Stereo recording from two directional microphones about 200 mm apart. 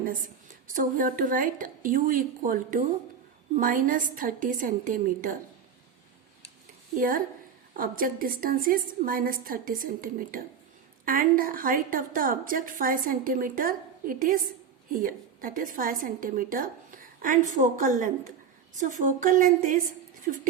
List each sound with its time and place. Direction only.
0.0 s a woman's voice: 40° right (ahead or behind)
6.9 s a woman's voice: 45° right (ahead or behind)